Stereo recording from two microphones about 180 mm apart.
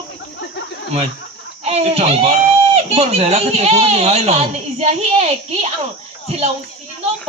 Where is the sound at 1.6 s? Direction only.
35° right (ahead or behind).